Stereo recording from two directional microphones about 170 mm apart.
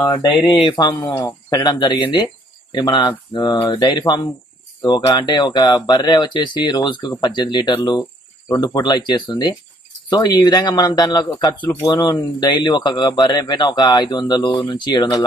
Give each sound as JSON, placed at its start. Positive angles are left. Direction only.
{"t": 0.0, "sound": "speech", "side_deg": 30}